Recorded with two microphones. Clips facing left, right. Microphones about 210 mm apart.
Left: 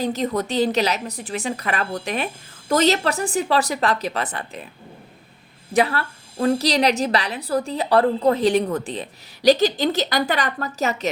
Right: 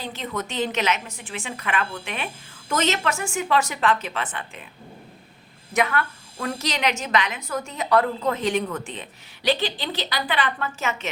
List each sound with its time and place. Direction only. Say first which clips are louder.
0.0 s a woman's voice: left 8 dB; 40° left (ahead or behind)
5.7 s a woman's voice: left 3 dB; 30° left (ahead or behind)